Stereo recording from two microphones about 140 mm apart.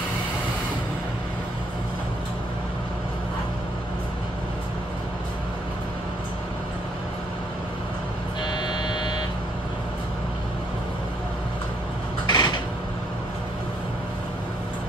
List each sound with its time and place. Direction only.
8.5 s vehicle: 30° left (ahead or behind)
12.3 s creak: 30° left (ahead or behind)